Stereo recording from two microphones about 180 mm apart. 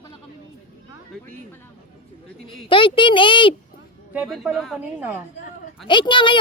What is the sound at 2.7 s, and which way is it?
Speech, 30° left (ahead or behind).